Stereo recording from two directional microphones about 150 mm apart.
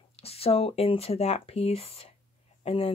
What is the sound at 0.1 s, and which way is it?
Speech, 40° left (ahead or behind).